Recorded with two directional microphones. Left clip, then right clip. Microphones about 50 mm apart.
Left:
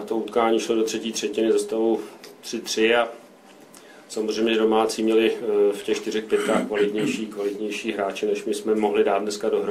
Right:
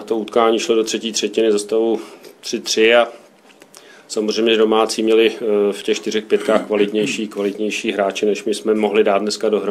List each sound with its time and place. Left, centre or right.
0.0 s speech: right
4.1 s speech: right